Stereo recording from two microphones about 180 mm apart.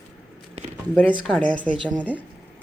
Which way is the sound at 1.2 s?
5° left (ahead or behind).